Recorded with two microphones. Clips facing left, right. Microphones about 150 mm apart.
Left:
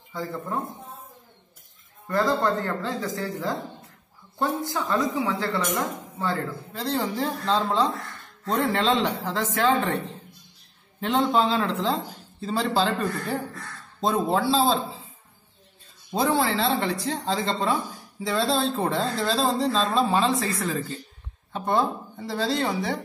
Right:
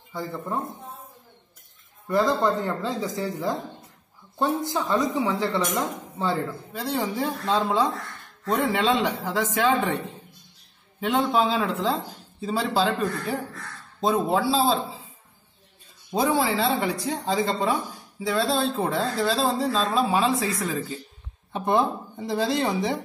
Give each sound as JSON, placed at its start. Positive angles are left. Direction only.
{"t": 0.1, "sound": "speech", "side_deg": -10}
{"t": 2.0, "sound": "speech", "side_deg": -15}
{"t": 11.0, "sound": "speech", "side_deg": -5}
{"t": 16.1, "sound": "speech", "side_deg": -5}
{"t": 21.5, "sound": "speech", "side_deg": -15}